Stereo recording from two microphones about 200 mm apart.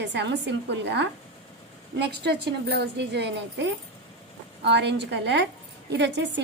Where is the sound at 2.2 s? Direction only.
55° right (ahead or behind).